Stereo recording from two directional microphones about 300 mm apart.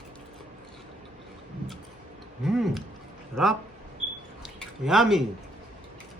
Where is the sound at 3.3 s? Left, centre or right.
Centre.